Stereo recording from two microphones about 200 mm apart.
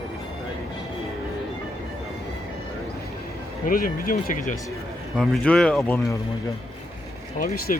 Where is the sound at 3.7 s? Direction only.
45° left (ahead or behind).